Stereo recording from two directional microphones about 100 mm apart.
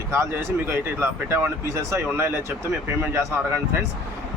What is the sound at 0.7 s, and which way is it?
Speech, 25° right (ahead or behind).